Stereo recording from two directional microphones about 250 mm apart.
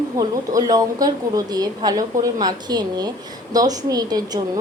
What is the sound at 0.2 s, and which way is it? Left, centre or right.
A woman's voice, centre.